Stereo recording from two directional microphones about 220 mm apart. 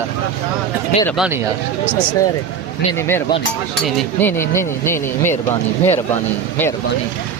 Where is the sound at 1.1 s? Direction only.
5° right (ahead or behind).